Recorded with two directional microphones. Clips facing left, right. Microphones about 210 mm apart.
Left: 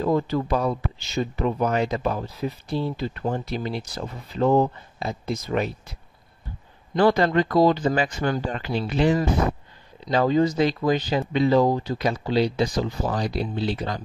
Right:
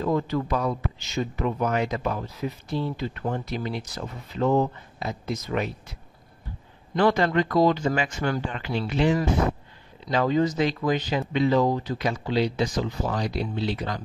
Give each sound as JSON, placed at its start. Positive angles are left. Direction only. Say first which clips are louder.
{"t": 0.0, "sound": "speech", "louder": "left 2 dB", "side_deg": 30}
{"t": 7.0, "sound": "speech", "louder": "left 2 dB", "side_deg": 35}